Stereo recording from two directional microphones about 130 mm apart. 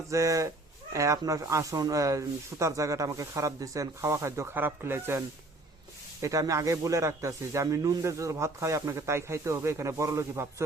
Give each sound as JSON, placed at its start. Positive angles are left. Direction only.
{"t": 0.1, "sound": "speech", "side_deg": -25}
{"t": 6.2, "sound": "speech", "side_deg": -25}